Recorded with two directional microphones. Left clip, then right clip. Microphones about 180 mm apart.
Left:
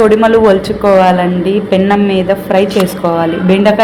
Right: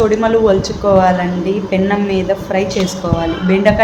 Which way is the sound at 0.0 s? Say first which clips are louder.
Left 5 dB; 25° left (ahead or behind).